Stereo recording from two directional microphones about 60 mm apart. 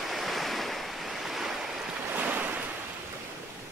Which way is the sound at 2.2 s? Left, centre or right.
Right.